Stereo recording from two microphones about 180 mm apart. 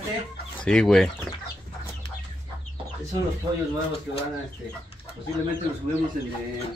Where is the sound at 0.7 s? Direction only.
5° left (ahead or behind).